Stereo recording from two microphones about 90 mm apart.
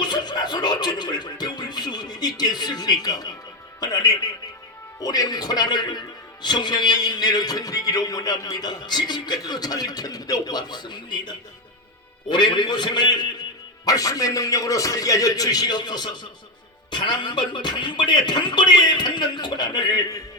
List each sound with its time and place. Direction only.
0.0 s music: 50° left (ahead or behind)
3.8 s a man's voice: 45° left (ahead or behind)